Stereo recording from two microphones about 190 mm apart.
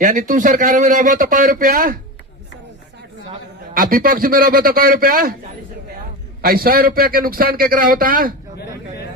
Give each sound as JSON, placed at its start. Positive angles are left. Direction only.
{"t": 0.0, "sound": "speech", "side_deg": -40}
{"t": 3.8, "sound": "speech", "side_deg": -50}
{"t": 6.4, "sound": "speech", "side_deg": -50}